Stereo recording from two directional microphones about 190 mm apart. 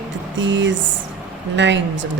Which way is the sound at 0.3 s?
70° right (ahead or behind).